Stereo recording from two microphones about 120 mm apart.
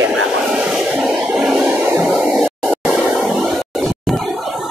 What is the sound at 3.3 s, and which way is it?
Music, centre (ahead or behind).